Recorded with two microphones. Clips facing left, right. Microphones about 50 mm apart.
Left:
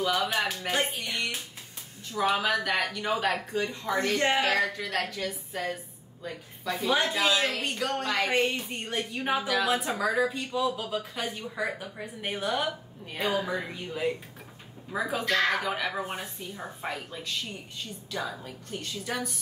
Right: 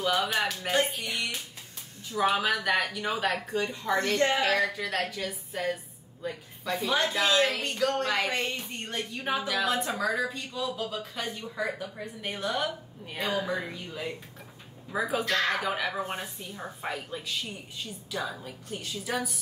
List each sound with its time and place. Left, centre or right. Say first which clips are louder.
0.3 s speech: right 1 dB; centre
7.3 s speech: right 3 dB; centre
7.6 s speech: right 2 dB; centre
14.9 s speech: even; centre